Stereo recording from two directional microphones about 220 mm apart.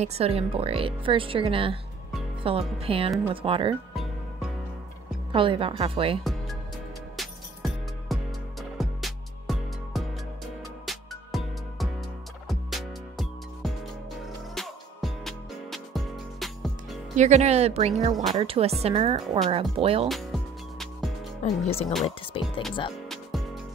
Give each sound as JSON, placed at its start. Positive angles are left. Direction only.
{"t": 0.0, "sound": "speech", "side_deg": -25}
{"t": 3.9, "sound": "music", "side_deg": 0}
{"t": 5.3, "sound": "speech", "side_deg": -25}
{"t": 6.2, "sound": "music", "side_deg": 0}
{"t": 17.1, "sound": "speech", "side_deg": -30}
{"t": 20.1, "sound": "speech", "side_deg": 0}
{"t": 20.8, "sound": "music", "side_deg": 0}
{"t": 21.5, "sound": "speech", "side_deg": 25}
{"t": 23.0, "sound": "music", "side_deg": 0}